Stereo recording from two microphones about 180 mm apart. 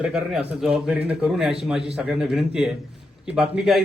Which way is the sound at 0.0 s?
5° right (ahead or behind).